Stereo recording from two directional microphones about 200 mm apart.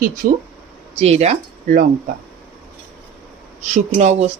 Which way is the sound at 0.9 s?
30° right (ahead or behind).